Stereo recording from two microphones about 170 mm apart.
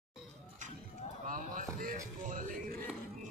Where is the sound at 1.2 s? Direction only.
55° right (ahead or behind).